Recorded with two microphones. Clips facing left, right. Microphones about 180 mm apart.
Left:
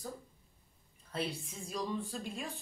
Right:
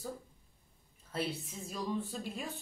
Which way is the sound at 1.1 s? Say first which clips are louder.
Right 1 dB; 5° right (ahead or behind).